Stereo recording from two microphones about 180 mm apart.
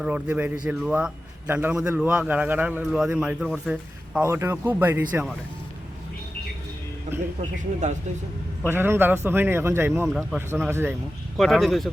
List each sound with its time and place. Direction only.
0.0 s a man's voice: 10° right (ahead or behind)
7.6 s speech: 40° right (ahead or behind)
8.6 s a man's voice: 10° right (ahead or behind)
10.1 s speech: centre (ahead or behind)
10.7 s a man's voice: 15° right (ahead or behind)
11.3 s speech: centre (ahead or behind)